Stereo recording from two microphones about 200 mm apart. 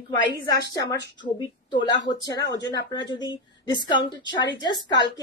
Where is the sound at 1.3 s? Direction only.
20° left (ahead or behind).